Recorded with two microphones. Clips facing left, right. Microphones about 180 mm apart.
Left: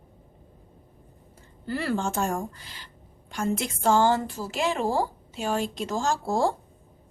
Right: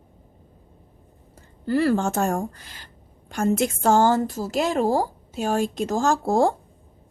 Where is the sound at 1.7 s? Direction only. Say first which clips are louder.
Right 7 dB; 45° right (ahead or behind).